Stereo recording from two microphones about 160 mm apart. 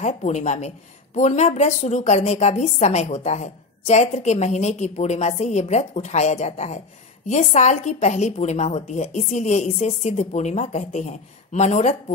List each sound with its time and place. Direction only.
0.0 s a woman's voice: 45° left (ahead or behind)